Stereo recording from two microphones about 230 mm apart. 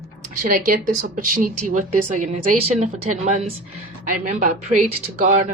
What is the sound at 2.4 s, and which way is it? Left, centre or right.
Speech, right.